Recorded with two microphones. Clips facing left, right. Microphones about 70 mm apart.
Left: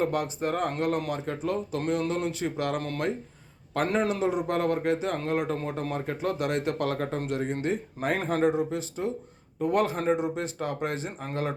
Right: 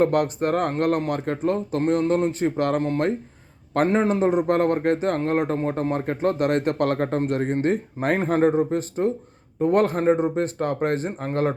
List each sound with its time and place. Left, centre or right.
0.0 s speech: right
3.8 s speech: right